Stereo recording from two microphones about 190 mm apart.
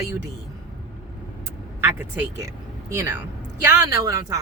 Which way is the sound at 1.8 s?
10° right (ahead or behind).